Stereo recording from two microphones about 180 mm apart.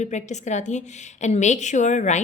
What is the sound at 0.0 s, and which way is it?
A woman's voice, 40° left (ahead or behind).